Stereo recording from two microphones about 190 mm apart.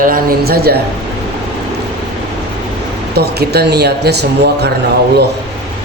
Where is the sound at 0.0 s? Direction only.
50° right (ahead or behind).